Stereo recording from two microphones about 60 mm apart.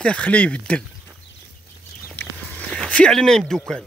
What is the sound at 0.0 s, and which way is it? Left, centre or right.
Speech, centre.